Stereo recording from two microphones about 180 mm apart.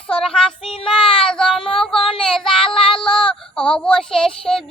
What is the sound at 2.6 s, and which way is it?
Child singing, 30° left (ahead or behind).